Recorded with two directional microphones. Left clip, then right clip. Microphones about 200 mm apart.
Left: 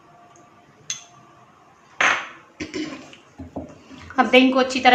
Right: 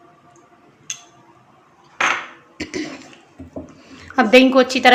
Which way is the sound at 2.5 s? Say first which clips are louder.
Right 3 dB; 50° right (ahead or behind).